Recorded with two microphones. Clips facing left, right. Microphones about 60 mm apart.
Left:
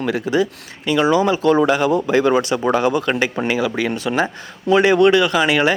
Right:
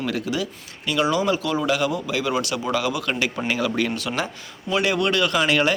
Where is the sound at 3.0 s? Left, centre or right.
Left.